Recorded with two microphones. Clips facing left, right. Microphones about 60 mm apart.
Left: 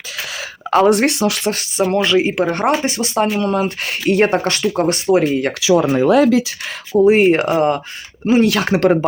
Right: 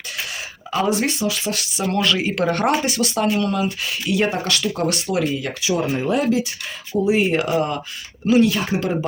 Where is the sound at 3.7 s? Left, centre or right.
Left.